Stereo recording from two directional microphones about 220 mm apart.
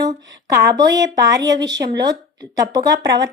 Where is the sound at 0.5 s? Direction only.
15° right (ahead or behind).